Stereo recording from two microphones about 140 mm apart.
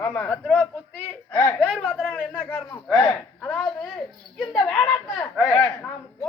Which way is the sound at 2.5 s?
15° left (ahead or behind).